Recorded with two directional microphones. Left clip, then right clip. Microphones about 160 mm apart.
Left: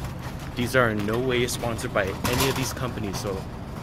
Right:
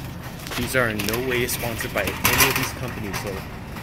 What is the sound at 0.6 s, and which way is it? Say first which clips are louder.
Speech: even; 10° left (ahead or behind).